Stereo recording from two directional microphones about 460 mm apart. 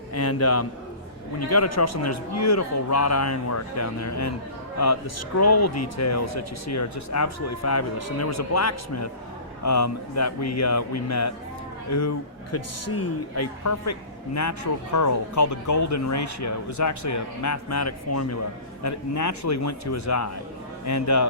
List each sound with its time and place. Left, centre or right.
0.1 s a man's voice: left